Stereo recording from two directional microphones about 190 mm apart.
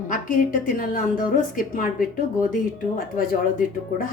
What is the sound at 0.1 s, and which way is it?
A woman's voice, 45° left (ahead or behind).